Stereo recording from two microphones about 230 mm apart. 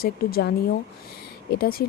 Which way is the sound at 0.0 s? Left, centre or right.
Left.